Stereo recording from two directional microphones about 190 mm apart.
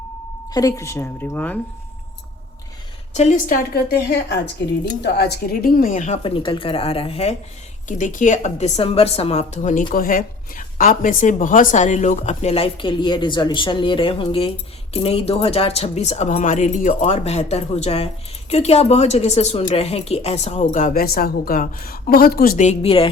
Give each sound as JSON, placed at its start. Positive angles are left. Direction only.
{"t": 0.5, "sound": "speech", "side_deg": 15}
{"t": 3.2, "sound": "a woman's voice", "side_deg": 40}
{"t": 20.7, "sound": "a woman's voice", "side_deg": 45}